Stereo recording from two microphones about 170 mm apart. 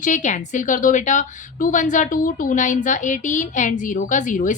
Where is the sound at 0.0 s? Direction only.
45° left (ahead or behind).